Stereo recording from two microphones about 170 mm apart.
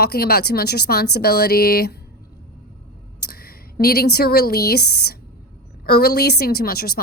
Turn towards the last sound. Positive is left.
turn(degrees=65)  # may be behind; listen again after turning